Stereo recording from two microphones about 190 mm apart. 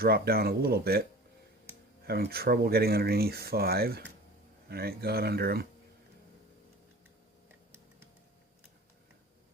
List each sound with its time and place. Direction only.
0.0 s speech: 55° right (ahead or behind)
2.0 s speech: 55° right (ahead or behind)